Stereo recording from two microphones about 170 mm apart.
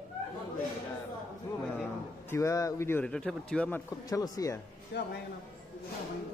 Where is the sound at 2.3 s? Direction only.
20° left (ahead or behind).